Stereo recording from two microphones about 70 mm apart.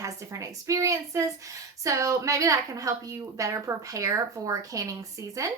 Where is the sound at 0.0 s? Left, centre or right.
Right.